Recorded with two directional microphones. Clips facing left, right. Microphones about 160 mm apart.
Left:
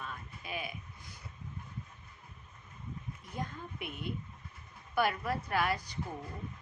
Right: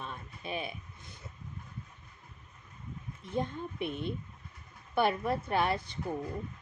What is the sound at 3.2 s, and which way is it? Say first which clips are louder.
Speech: right 8 dB; 25° right (ahead or behind).